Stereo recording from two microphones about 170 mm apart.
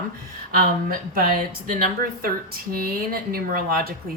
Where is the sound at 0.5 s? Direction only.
60° right (ahead or behind).